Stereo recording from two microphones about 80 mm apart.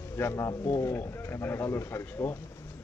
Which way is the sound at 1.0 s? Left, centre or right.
Left.